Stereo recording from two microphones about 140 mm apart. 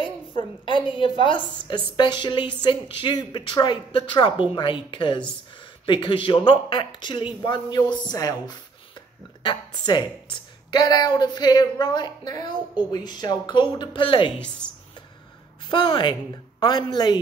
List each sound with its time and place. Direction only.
0.4 s a woman's voice: 35° left (ahead or behind)
14.6 s a sound: 10° left (ahead or behind)
15.7 s a woman's voice: 30° left (ahead or behind)